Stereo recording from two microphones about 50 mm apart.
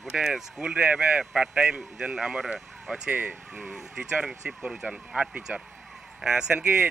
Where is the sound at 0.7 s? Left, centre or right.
Right.